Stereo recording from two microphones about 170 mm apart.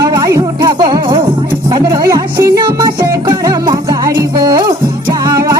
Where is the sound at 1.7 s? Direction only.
25° right (ahead or behind).